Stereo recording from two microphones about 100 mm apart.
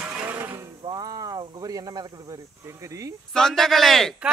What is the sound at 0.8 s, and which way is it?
Speech, 40° right (ahead or behind).